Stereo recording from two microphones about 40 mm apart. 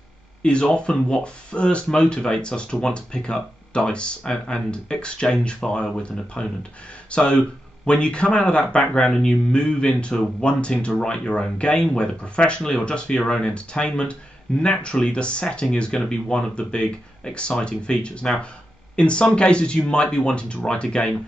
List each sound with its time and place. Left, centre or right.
0.4 s speech: left
12.6 s speech: centre